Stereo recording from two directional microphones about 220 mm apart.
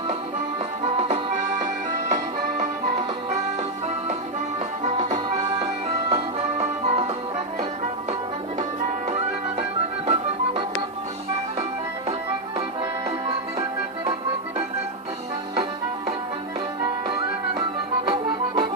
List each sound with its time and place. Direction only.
0.8 s music: 25° right (ahead or behind)
4.8 s music: 30° right (ahead or behind)
5.1 s music: 15° right (ahead or behind)
6.1 s music: 25° right (ahead or behind)
10.1 s music: 20° right (ahead or behind)
12.5 s music: 20° right (ahead or behind)
16.8 s accordion: 20° right (ahead or behind)